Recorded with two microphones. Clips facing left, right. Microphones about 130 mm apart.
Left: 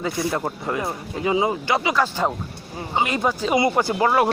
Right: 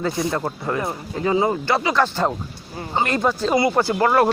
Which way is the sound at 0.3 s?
15° left (ahead or behind).